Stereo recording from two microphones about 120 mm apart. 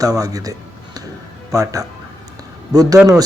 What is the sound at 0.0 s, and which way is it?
A man's voice, 30° right (ahead or behind).